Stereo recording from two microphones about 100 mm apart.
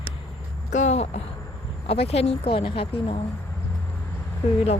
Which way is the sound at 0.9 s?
90° left.